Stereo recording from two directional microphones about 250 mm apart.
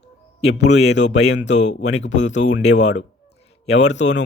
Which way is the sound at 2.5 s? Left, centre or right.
Left.